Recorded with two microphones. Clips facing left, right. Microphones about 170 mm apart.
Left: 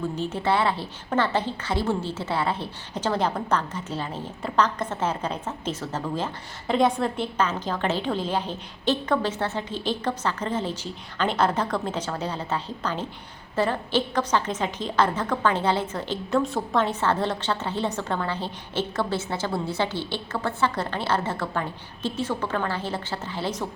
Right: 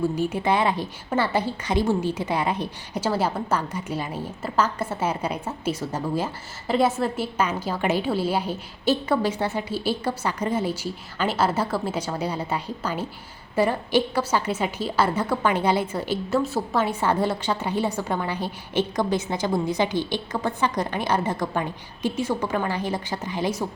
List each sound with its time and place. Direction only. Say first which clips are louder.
0.2 s a woman's voice: right 2 dB; 10° right (ahead or behind)